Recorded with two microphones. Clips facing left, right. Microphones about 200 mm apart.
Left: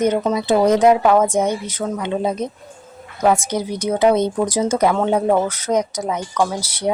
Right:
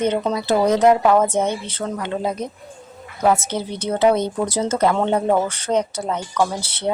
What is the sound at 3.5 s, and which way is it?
A woman's voice, 10° left (ahead or behind).